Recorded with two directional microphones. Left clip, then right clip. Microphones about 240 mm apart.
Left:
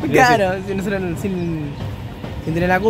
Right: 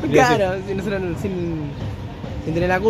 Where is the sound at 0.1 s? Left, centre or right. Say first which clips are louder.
Left 2 dB; centre.